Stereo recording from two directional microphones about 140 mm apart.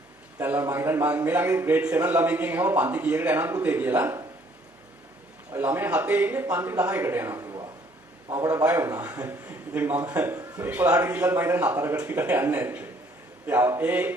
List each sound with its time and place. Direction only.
0.3 s a man's voice: 15° right (ahead or behind)
5.5 s a man's voice: 15° right (ahead or behind)
8.4 s a man's voice: 15° right (ahead or behind)